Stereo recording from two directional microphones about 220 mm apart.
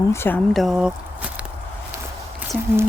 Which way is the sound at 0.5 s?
Centre (ahead or behind).